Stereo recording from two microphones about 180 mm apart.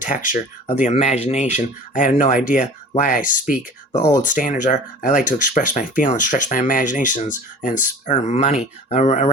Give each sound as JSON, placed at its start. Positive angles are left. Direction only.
{"t": 0.0, "sound": "speech", "side_deg": 50}
{"t": 3.9, "sound": "speech", "side_deg": 20}
{"t": 4.2, "sound": "speech", "side_deg": 45}